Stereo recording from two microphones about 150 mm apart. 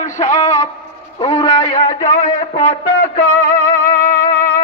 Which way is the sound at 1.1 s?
30° left (ahead or behind).